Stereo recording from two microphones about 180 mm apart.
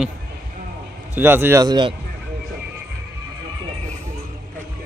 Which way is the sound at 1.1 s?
10° right (ahead or behind).